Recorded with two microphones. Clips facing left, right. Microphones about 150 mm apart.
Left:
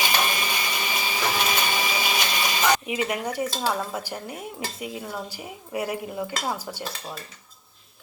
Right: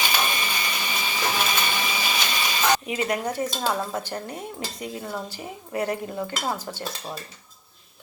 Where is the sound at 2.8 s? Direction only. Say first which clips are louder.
Right 1 dB; 10° left (ahead or behind).